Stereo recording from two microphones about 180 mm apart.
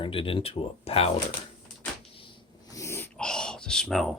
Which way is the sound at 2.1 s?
30° left (ahead or behind).